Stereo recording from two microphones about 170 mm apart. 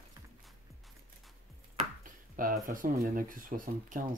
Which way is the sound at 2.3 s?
55° right (ahead or behind).